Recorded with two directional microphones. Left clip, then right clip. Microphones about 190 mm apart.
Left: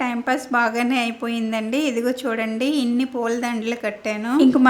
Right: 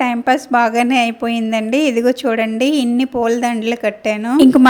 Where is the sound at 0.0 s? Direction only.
30° right (ahead or behind).